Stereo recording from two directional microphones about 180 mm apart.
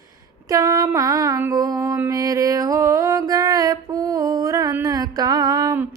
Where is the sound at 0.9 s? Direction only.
20° right (ahead or behind).